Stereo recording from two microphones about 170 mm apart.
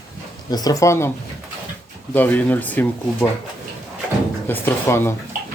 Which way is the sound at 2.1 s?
10° left (ahead or behind).